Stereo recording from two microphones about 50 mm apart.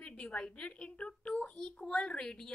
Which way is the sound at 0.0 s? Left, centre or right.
Left.